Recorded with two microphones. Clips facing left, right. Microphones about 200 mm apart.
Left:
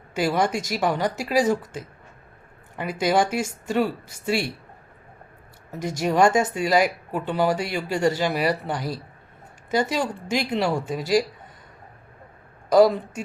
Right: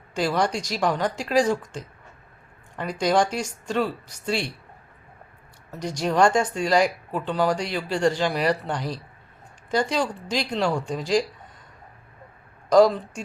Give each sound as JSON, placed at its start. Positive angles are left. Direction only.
{"t": 0.1, "sound": "speech", "side_deg": 5}
{"t": 6.0, "sound": "speech", "side_deg": 5}
{"t": 12.7, "sound": "speech", "side_deg": 5}